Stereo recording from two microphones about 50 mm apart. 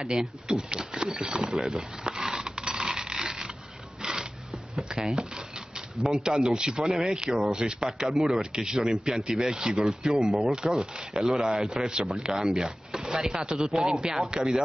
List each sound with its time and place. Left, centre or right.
0.0 s speech: centre
2.0 s a sound: centre
6.2 s speech: centre